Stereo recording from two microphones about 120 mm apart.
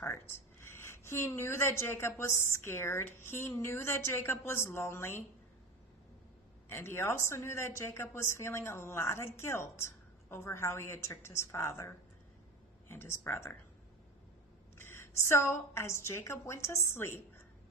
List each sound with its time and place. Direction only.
0.6 s speech: 20° left (ahead or behind)
6.7 s speech: 20° left (ahead or behind)
14.8 s speech: 20° left (ahead or behind)